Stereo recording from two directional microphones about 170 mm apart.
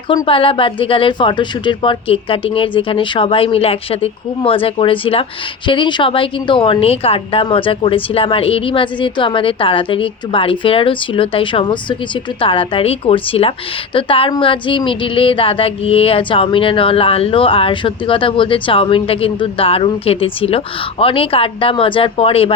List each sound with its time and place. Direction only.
0.1 s a woman's voice: 30° left (ahead or behind)